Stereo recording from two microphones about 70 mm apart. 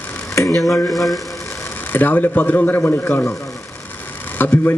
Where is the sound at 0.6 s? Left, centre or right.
Left.